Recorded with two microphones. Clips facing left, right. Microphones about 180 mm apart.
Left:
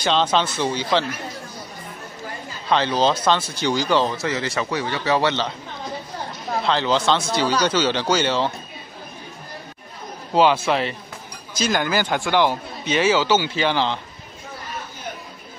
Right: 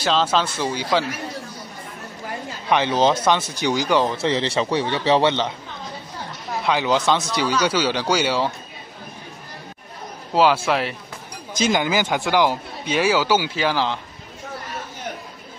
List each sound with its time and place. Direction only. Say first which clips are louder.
0.0 s speech: even; 5° right (ahead or behind)
2.7 s speech: right 1 dB; 20° right (ahead or behind)
4.2 s a man's voice: right 3 dB; 30° right (ahead or behind)
6.6 s speech: right 1 dB; 10° right (ahead or behind)
10.3 s speech: even; 5° right (ahead or behind)